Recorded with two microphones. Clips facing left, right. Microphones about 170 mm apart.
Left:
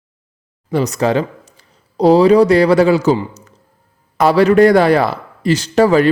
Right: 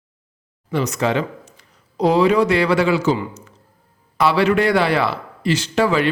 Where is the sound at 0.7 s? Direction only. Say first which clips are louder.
Left 5 dB; 35° left (ahead or behind).